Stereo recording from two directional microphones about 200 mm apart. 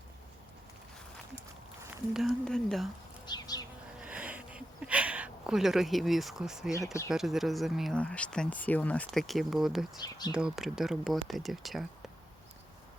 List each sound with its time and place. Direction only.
1.8 s speech: 5° right (ahead or behind)
3.2 s bee: 20° left (ahead or behind)
4.0 s a sound: 5° right (ahead or behind)
7.1 s speech: centre (ahead or behind)
10.0 s speech: 20° left (ahead or behind)
10.3 s speech: 5° right (ahead or behind)